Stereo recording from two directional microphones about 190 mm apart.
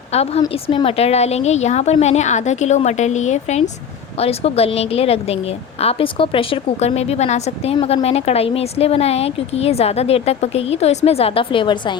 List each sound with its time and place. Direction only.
0.1 s speech: 35° left (ahead or behind)